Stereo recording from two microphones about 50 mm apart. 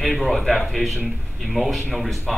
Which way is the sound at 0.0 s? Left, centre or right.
Centre.